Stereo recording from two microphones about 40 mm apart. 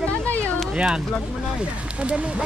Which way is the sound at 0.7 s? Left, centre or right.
Centre.